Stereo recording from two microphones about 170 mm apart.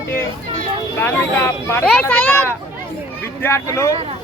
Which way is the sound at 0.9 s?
15° left (ahead or behind).